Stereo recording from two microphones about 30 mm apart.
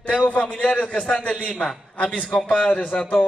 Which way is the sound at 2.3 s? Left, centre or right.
Left.